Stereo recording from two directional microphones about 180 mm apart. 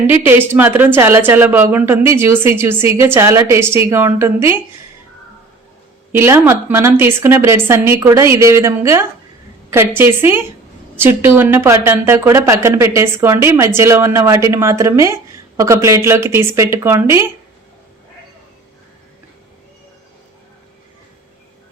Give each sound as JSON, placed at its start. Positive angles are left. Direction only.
{"t": 0.1, "sound": "a woman's voice", "side_deg": -10}
{"t": 6.1, "sound": "a woman's voice", "side_deg": -15}